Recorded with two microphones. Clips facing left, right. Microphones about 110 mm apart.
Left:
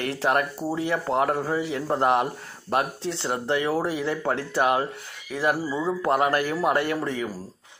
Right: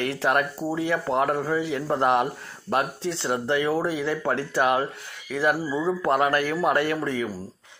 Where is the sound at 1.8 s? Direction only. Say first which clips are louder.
Even; 25° left (ahead or behind).